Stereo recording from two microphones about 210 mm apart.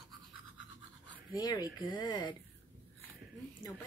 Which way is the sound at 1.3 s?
20° left (ahead or behind).